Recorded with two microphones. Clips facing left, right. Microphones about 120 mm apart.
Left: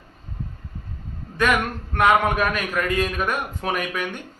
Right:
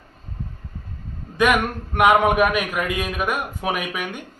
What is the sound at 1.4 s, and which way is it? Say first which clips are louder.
A man's voice: right 2 dB; 15° right (ahead or behind).